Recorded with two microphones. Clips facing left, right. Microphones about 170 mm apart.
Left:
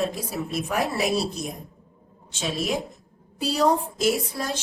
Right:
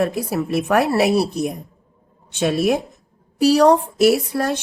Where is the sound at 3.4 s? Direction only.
75° right (ahead or behind).